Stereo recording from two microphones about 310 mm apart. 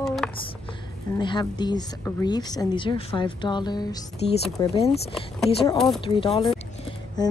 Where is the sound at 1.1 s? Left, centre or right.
Centre.